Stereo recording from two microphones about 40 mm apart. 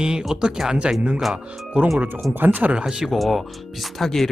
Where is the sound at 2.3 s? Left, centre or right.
Right.